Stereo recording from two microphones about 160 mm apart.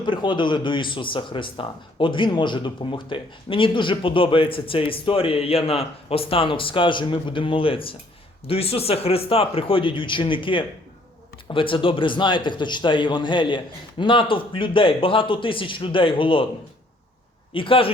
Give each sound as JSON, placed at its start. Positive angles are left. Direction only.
{"t": 0.0, "sound": "a man's voice", "side_deg": 30}
{"t": 17.5, "sound": "speech", "side_deg": 35}